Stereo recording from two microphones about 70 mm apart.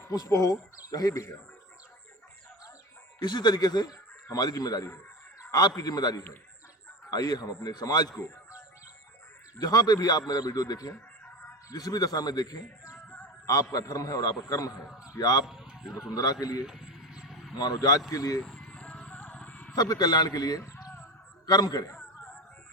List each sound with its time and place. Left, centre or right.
0.1 s a man's voice: left
3.2 s a man's voice: left
9.6 s a man's voice: left
13.7 s a man's voice: left
15.4 s vehicle: centre
16.1 s a man's voice: left
16.6 s vehicle: centre
17.6 s a man's voice: left
18.1 s speech: left
18.5 s music: centre
19.7 s a man's voice: left
21.4 s a man's voice: left